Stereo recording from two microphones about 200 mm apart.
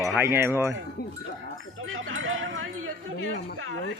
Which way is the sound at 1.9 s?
85° right.